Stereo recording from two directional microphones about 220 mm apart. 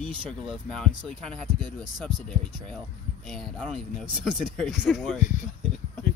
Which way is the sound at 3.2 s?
Centre (ahead or behind).